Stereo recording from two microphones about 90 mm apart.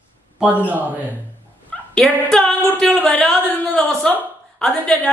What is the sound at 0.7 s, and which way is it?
Speech, 20° right (ahead or behind).